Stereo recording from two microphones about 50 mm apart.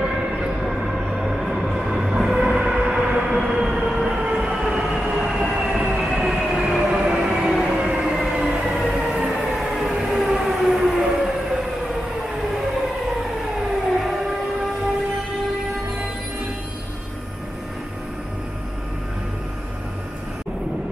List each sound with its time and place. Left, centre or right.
0.0 s train: centre
4.3 s train: centre
6.9 s a sound: centre
8.0 s train: centre